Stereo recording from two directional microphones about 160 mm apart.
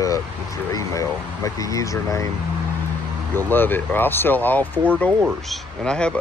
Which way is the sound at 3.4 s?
10° left (ahead or behind).